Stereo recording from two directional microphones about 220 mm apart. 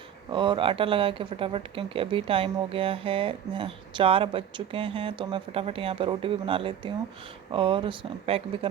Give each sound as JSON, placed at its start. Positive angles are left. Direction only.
{"t": 0.3, "sound": "speech", "side_deg": -20}